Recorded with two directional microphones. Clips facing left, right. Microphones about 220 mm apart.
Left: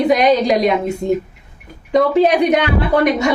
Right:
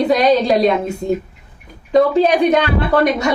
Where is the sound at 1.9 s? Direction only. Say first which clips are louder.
Even; 20° left (ahead or behind).